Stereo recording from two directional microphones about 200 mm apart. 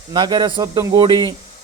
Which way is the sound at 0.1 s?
20° right (ahead or behind).